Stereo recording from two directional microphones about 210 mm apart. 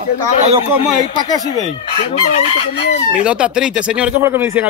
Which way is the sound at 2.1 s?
30° left (ahead or behind).